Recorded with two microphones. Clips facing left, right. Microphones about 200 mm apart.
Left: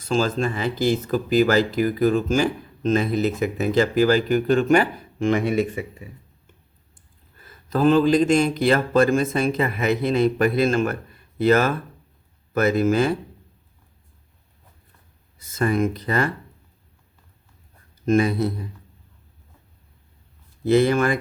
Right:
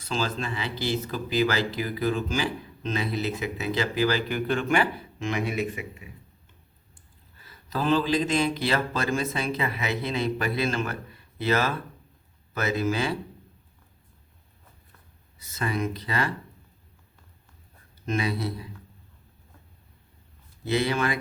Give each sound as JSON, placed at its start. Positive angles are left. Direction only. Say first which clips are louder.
{"t": 0.0, "sound": "speech", "louder": "left 8 dB", "side_deg": 45}
{"t": 7.4, "sound": "speech", "louder": "left 8 dB", "side_deg": 50}
{"t": 15.4, "sound": "speech", "louder": "left 8 dB", "side_deg": 50}
{"t": 18.0, "sound": "speech", "louder": "left 9 dB", "side_deg": 50}
{"t": 20.7, "sound": "speech", "louder": "left 8 dB", "side_deg": 50}